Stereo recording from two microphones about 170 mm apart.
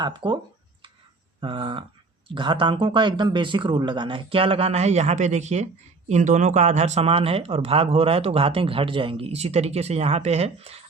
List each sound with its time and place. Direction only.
0.0 s speech: 25° right (ahead or behind)
1.4 s speech: 30° right (ahead or behind)